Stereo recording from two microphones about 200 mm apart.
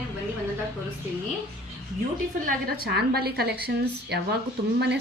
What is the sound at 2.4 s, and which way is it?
A woman's voice, 45° right (ahead or behind).